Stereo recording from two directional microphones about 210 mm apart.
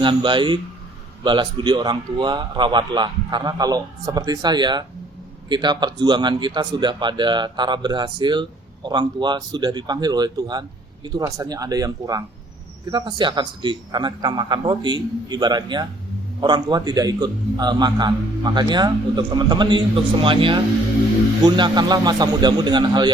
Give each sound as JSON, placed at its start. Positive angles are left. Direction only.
{"t": 0.0, "sound": "speech", "side_deg": -25}